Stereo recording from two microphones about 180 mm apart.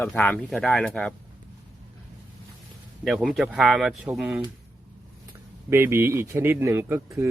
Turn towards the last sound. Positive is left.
turn(degrees=-15)  # may be behind; listen again after turning